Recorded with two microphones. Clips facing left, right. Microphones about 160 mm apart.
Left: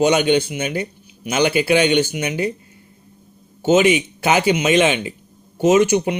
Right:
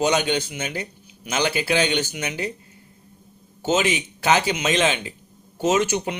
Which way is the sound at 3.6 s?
15° left (ahead or behind).